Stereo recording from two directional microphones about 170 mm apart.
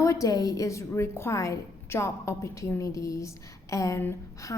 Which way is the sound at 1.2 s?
15° left (ahead or behind).